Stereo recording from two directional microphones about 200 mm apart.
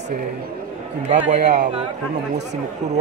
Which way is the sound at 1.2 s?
35° right (ahead or behind).